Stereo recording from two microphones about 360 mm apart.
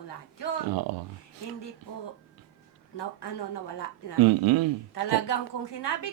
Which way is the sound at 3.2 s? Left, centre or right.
Left.